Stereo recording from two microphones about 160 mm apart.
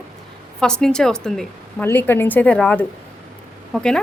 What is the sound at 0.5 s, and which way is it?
A woman's voice, 5° left (ahead or behind).